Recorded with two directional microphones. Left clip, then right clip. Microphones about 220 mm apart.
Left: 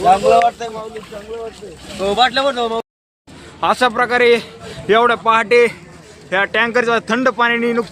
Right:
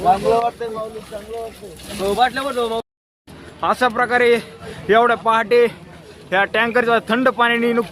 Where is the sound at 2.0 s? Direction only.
30° left (ahead or behind); by 2.8 s 55° left (ahead or behind).